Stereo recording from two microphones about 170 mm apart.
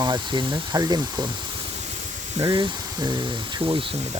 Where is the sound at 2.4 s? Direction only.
25° right (ahead or behind).